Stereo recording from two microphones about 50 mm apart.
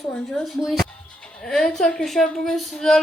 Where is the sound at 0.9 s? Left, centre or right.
Centre.